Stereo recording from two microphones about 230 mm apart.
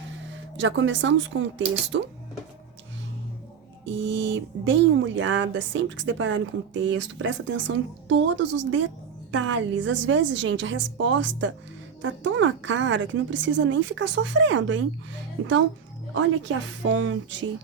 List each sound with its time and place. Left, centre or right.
0.3 s speech: right
3.8 s speech: right